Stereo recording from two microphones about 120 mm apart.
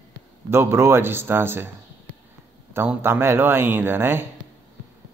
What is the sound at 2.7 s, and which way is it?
Speech, 20° right (ahead or behind).